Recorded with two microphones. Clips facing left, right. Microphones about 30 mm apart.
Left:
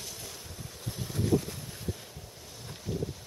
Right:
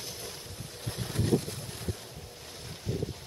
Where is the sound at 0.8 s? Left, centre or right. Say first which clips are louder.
Even; right.